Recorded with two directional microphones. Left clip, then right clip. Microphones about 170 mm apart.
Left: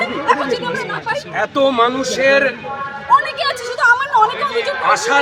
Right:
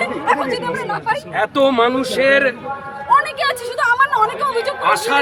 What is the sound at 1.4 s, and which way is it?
Speech, 40° right (ahead or behind).